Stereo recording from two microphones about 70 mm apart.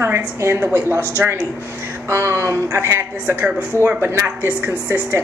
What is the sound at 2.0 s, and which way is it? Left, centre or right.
A woman's voice, right.